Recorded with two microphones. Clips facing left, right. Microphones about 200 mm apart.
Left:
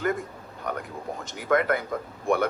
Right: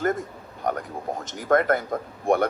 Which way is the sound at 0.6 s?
40° right (ahead or behind).